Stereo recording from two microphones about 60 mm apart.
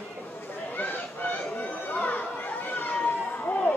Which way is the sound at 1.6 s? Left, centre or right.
Left.